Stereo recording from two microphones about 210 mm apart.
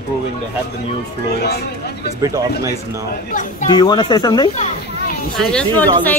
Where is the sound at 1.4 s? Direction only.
50° left (ahead or behind).